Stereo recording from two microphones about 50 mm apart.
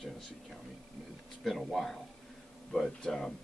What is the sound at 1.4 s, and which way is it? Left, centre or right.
Speech, centre.